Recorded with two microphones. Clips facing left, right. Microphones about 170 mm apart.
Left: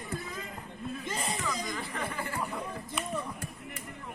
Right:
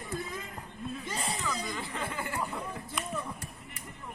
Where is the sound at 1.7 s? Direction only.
20° right (ahead or behind).